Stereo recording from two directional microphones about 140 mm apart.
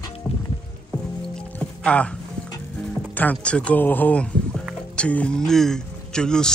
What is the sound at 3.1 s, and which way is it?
A man's voice, 10° left (ahead or behind).